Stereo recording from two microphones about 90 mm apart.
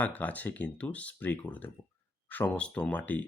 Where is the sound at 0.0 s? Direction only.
15° left (ahead or behind).